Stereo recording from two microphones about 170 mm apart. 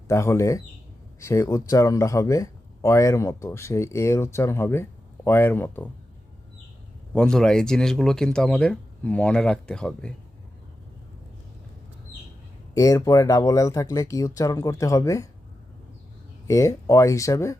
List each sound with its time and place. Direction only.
0.1 s speech: 15° left (ahead or behind)
7.1 s speech: 5° left (ahead or behind)
12.7 s speech: 20° left (ahead or behind)
16.5 s speech: 20° left (ahead or behind)